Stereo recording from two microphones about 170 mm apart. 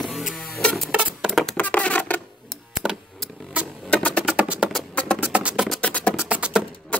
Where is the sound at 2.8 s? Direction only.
5° right (ahead or behind).